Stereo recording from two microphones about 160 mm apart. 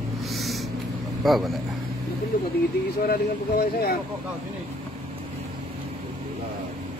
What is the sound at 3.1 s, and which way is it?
Speech, 70° left (ahead or behind).